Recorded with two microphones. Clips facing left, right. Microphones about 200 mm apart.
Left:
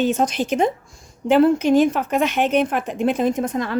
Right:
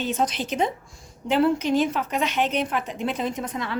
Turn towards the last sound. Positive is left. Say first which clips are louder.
# left 8 dB
turn(degrees=45)  # may be behind; listen again after turning